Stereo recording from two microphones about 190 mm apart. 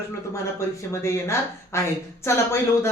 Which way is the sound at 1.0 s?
15° left (ahead or behind).